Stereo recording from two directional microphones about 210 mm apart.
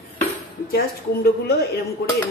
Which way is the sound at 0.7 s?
45° left (ahead or behind).